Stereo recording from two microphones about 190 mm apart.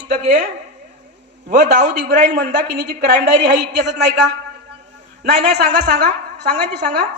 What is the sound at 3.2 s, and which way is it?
Speech, 65° right (ahead or behind).